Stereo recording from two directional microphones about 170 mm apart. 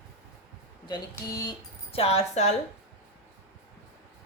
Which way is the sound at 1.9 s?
35° left (ahead or behind).